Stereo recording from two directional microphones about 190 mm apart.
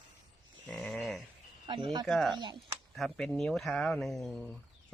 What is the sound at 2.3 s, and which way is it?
Speech, 20° right (ahead or behind).